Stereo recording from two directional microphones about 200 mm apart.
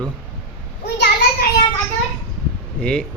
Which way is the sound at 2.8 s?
5° left (ahead or behind).